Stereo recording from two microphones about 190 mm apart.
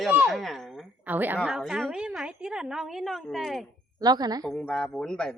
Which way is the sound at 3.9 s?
20° right (ahead or behind).